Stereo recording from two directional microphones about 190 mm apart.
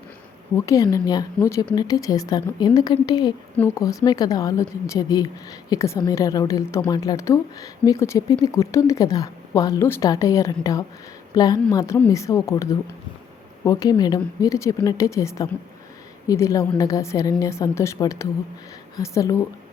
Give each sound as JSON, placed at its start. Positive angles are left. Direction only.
{"t": 0.5, "sound": "a woman's voice", "side_deg": 15}
{"t": 13.7, "sound": "speech", "side_deg": 20}